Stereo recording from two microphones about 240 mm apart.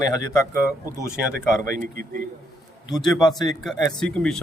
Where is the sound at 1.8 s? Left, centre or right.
Right.